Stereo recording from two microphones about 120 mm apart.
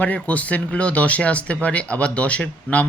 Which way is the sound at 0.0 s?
10° left (ahead or behind).